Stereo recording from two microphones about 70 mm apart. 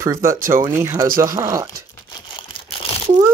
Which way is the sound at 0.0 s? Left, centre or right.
Right.